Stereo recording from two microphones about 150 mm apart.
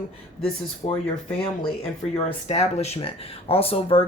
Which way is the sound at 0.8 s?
40° left (ahead or behind).